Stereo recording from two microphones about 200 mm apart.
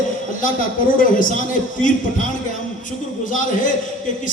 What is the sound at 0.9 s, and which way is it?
Speech, 40° left (ahead or behind).